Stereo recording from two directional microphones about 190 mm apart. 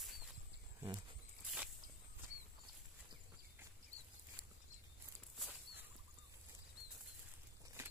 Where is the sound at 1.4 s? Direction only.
5° right (ahead or behind).